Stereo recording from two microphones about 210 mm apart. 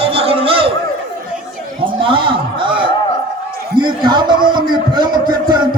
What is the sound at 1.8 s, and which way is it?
A man's voice, 25° right (ahead or behind).